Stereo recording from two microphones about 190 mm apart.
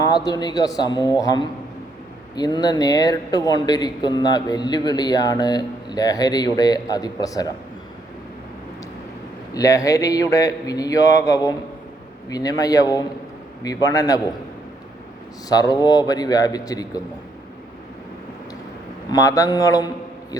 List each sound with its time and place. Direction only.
0.0 s speech: 20° left (ahead or behind)
9.6 s speech: 15° left (ahead or behind)
15.4 s speech: 20° left (ahead or behind)
19.1 s speech: 20° left (ahead or behind)